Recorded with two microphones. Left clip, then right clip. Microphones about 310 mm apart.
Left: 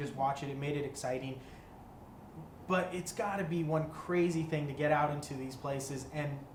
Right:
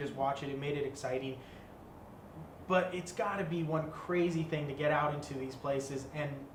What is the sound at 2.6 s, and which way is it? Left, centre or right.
Speech, centre.